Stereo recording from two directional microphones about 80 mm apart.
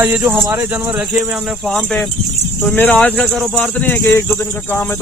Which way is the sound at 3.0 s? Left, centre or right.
Centre.